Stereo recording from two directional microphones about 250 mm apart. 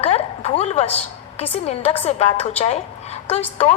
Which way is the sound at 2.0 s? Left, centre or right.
Left.